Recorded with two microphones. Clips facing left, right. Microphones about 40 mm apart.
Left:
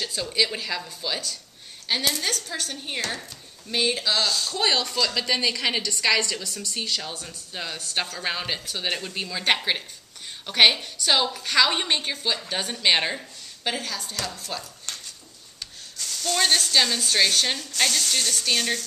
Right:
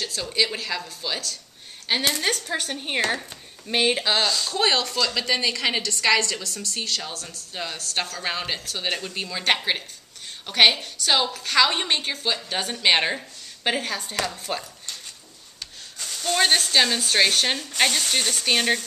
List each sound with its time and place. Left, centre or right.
0.0 s a woman's voice: centre
2.0 s speech: right
4.5 s a woman's voice: centre
16.0 s speech: centre